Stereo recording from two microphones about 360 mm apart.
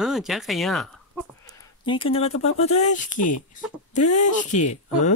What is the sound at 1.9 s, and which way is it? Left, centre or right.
Speech, centre.